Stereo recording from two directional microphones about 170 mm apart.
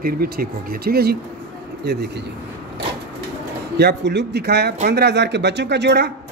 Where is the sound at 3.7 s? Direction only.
85° right.